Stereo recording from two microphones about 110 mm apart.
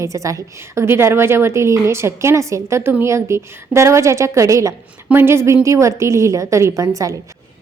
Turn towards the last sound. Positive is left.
turn(degrees=-30)  # may be behind; listen again after turning